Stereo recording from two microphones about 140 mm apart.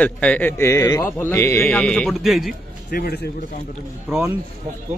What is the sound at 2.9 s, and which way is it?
Speech, 90° left.